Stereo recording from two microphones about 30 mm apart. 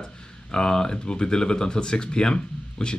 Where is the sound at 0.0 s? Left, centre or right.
Left.